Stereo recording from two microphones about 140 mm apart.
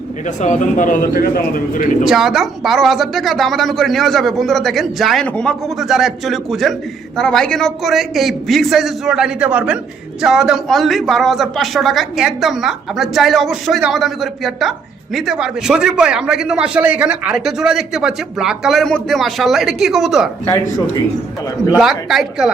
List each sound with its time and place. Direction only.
0.3 s speech: 60° left (ahead or behind)
2.0 s speech: centre (ahead or behind)
21.8 s speech: centre (ahead or behind)